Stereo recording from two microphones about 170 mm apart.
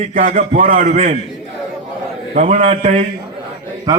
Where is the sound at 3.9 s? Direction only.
20° right (ahead or behind).